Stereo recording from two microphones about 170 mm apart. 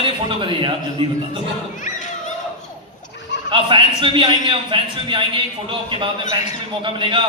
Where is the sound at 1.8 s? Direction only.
45° left (ahead or behind).